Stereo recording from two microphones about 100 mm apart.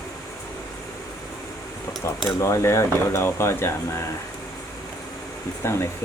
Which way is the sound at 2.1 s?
30° left (ahead or behind).